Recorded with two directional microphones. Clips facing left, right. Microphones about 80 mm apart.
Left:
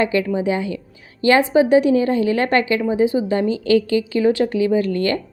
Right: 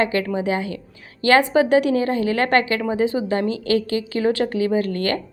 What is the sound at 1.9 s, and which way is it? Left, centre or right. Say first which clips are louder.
Speech: left 3 dB; right.